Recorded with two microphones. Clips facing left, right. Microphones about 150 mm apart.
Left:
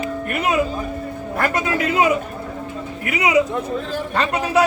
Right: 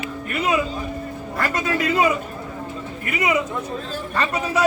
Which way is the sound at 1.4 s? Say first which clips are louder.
Left 2 dB; 60° left (ahead or behind).